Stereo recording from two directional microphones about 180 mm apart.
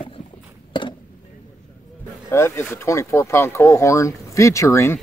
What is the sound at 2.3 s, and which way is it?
Speech, 15° left (ahead or behind).